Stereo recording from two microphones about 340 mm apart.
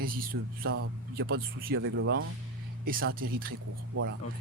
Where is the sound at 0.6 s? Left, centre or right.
Right.